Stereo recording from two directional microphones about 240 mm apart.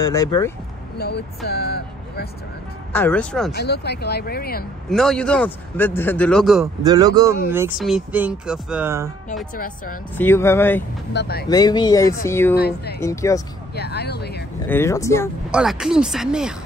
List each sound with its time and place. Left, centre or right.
0.0 s speech: centre
0.9 s speech: left
2.9 s a man's voice: centre
3.5 s speech: left
4.8 s a man's voice: centre
6.6 s a man's voice: centre
10.1 s speech: centre
11.1 s speech: left
11.4 s speech: centre
12.5 s speech: left
13.0 s speech: centre
13.7 s speech: left
14.7 s speech: centre
15.5 s a man's voice: centre